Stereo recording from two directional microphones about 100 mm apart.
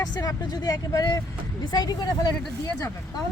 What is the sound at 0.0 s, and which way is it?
Speech, 35° left (ahead or behind).